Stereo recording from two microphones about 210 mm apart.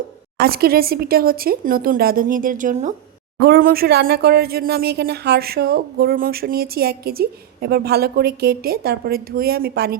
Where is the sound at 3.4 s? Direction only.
45° right (ahead or behind).